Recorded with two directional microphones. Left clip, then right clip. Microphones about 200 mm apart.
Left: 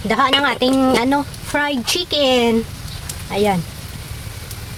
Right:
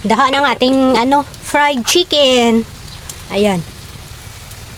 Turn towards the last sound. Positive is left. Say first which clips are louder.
# right 3 dB
turn(degrees=-35)  # may be behind; listen again after turning